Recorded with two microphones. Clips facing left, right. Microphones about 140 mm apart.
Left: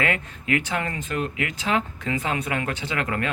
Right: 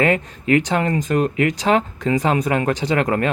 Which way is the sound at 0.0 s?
35° right (ahead or behind).